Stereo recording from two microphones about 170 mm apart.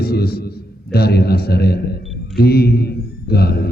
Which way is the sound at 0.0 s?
70° left (ahead or behind).